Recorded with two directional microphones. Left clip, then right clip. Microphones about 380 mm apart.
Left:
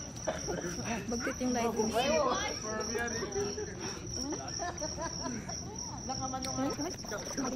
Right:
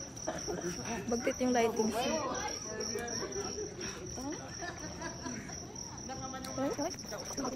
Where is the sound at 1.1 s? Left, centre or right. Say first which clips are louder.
Right 4 dB; right.